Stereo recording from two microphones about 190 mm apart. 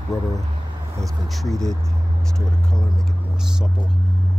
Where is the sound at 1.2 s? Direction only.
Centre (ahead or behind).